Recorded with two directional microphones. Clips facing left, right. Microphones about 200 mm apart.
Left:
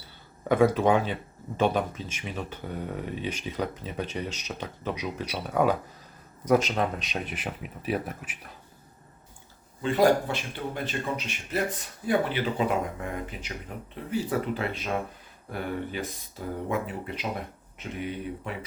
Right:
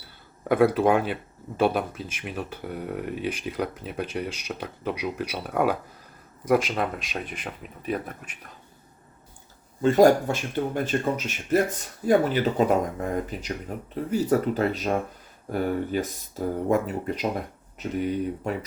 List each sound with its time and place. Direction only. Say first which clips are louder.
0.4 s speech: right 2 dB; 10° right (ahead or behind)
9.8 s speech: right 5 dB; 45° right (ahead or behind)